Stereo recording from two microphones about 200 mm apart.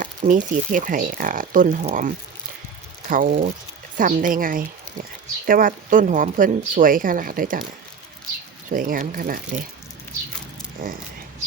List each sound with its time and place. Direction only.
0.0 s speech: 40° right (ahead or behind)
8.7 s speech: 45° right (ahead or behind)
10.8 s speech: 45° right (ahead or behind)